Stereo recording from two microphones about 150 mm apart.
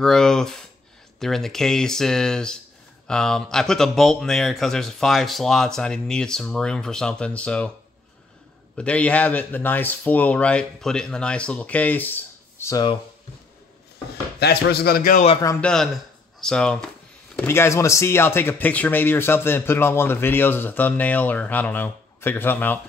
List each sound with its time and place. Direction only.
0.0 s speech: 5° left (ahead or behind)
8.7 s speech: 10° left (ahead or behind)
14.4 s a man's voice: 90° left; by 15.2 s 70° left (ahead or behind)
15.6 s speech: 5° left (ahead or behind)
17.4 s speech: 15° left (ahead or behind)